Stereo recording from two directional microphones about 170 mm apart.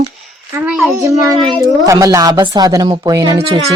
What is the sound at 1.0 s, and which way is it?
Speech, 20° right (ahead or behind).